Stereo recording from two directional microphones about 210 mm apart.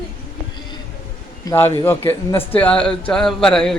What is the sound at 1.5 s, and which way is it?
A man's voice, 10° left (ahead or behind).